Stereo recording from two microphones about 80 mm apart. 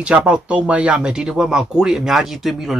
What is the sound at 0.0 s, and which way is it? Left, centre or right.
Speech, centre.